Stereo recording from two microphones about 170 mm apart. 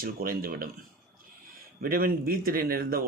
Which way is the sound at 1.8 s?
60° right (ahead or behind).